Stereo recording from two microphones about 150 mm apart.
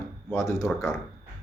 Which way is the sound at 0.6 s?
Centre (ahead or behind).